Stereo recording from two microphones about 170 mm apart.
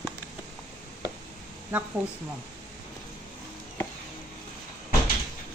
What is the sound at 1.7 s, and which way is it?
Speech, 10° right (ahead or behind).